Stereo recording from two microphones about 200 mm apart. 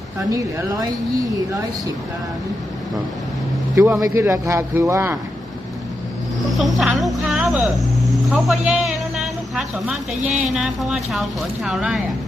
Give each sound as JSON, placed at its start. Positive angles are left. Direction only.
{"t": 0.3, "sound": "speech", "side_deg": -15}
{"t": 4.0, "sound": "speech", "side_deg": -15}
{"t": 6.5, "sound": "speech", "side_deg": 0}